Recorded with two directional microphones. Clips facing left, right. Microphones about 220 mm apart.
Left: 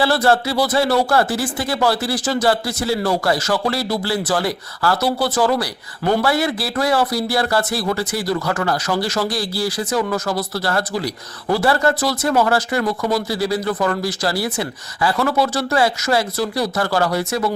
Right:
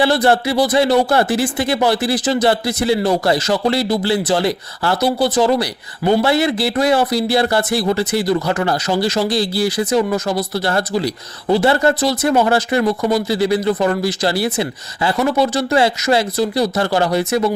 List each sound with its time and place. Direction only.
0.0 s a man's voice: 20° right (ahead or behind)